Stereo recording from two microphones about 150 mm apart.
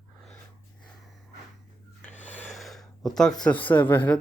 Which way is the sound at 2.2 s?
10° left (ahead or behind).